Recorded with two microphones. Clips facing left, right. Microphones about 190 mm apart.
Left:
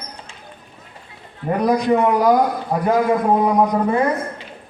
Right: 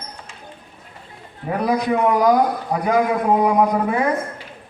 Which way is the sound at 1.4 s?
5° right (ahead or behind).